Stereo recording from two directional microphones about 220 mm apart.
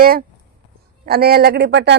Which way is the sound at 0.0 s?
40° right (ahead or behind).